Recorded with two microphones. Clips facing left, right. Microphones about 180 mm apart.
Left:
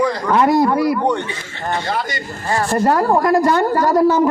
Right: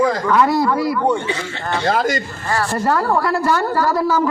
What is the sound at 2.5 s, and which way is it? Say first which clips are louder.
Speech: left 3 dB; 25° left (ahead or behind).